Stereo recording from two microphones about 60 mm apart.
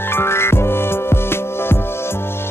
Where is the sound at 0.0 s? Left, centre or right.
Left.